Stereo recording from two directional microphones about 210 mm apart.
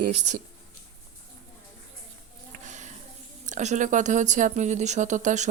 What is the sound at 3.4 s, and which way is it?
Speech, 35° right (ahead or behind).